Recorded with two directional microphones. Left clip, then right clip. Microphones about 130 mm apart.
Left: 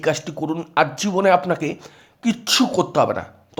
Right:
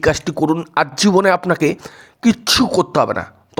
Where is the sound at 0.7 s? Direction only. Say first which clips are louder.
Right 1 dB; 40° right (ahead or behind).